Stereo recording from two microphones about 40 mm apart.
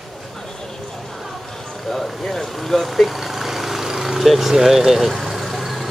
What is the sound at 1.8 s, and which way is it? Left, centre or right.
Speech, centre.